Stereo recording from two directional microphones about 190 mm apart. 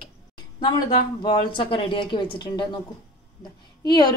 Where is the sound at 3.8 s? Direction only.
20° left (ahead or behind).